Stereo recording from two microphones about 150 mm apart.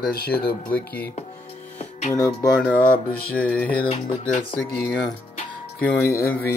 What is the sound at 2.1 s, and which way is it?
Speech, 25° left (ahead or behind).